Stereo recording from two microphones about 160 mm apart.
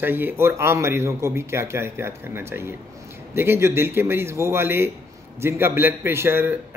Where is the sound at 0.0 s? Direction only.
15° right (ahead or behind).